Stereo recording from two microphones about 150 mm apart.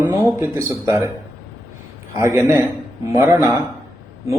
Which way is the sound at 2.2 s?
15° right (ahead or behind).